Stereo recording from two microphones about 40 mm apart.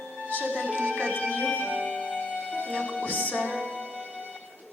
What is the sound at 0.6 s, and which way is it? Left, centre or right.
Speech, left.